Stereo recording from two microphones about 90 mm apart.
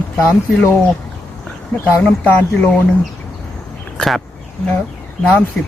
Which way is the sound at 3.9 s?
Centre (ahead or behind).